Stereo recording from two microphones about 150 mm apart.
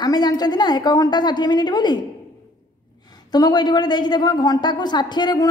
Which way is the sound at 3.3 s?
25° left (ahead or behind).